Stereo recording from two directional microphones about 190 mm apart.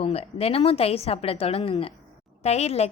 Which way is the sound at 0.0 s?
30° left (ahead or behind).